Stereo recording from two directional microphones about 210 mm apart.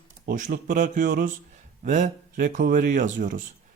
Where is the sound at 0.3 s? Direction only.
40° right (ahead or behind).